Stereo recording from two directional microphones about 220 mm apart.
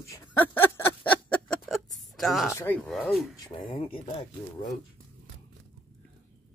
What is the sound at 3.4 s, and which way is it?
Speech, 25° left (ahead or behind).